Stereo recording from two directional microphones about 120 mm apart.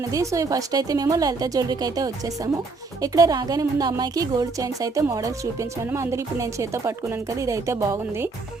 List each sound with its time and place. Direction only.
0.0 s a woman's voice: 25° right (ahead or behind)